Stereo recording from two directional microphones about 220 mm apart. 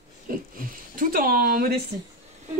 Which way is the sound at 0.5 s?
40° right (ahead or behind).